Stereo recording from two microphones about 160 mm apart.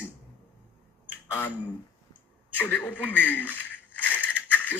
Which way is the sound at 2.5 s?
10° left (ahead or behind).